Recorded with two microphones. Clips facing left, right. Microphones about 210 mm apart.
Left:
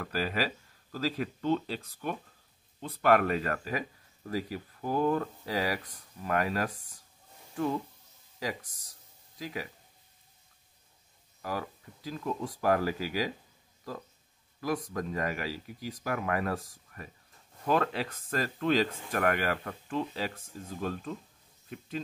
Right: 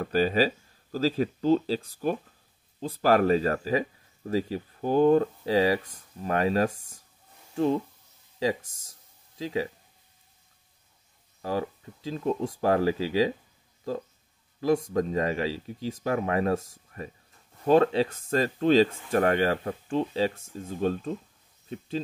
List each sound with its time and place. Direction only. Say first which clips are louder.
0.0 s speech: right 8 dB; 25° right (ahead or behind)
11.4 s speech: right 6 dB; 25° right (ahead or behind)
14.6 s speech: right 8 dB; 25° right (ahead or behind)